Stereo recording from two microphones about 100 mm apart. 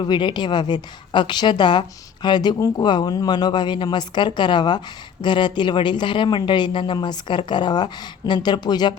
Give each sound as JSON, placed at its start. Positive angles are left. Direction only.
{"t": 0.0, "sound": "a woman's voice", "side_deg": 50}